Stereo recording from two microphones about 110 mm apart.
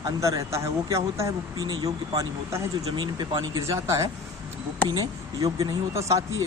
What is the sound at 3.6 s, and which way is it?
Speech, 30° right (ahead or behind).